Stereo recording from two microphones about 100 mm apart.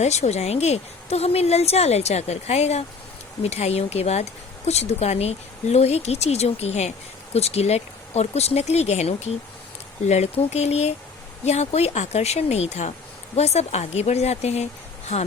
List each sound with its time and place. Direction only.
0.1 s speech: 90° left